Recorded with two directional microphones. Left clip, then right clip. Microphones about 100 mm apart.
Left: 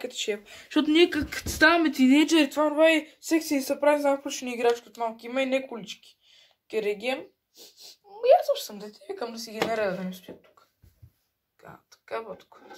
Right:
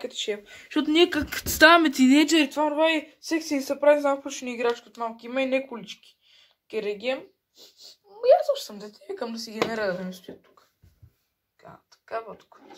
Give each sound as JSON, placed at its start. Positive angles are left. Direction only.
{"t": 0.0, "sound": "speech", "side_deg": 5}
{"t": 0.5, "sound": "speech", "side_deg": 20}
{"t": 1.3, "sound": "speech", "side_deg": -65}
{"t": 2.2, "sound": "speech", "side_deg": -25}
{"t": 11.6, "sound": "speech", "side_deg": 20}